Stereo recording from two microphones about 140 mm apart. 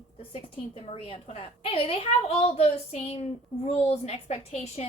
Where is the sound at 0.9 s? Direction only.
45° left (ahead or behind).